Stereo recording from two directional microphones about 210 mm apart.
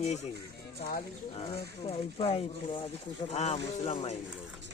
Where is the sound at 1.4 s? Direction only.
25° left (ahead or behind).